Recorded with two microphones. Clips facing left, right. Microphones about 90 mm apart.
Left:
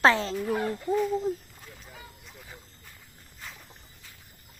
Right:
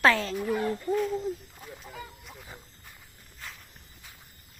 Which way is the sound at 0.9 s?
5° left (ahead or behind).